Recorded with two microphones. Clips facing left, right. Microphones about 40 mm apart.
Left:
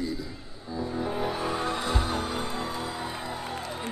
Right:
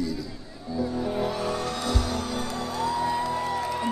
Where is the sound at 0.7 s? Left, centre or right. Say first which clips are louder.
Right 3 dB; left.